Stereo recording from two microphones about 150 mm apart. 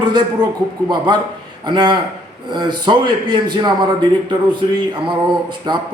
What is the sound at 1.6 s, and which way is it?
A man's voice, 30° right (ahead or behind).